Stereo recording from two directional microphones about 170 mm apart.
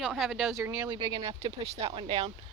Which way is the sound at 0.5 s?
15° right (ahead or behind).